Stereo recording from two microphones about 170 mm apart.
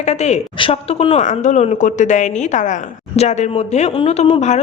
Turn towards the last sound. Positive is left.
turn(degrees=40)  # may be behind; listen again after turning